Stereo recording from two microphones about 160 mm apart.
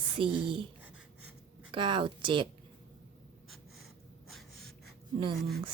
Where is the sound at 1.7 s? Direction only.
30° right (ahead or behind).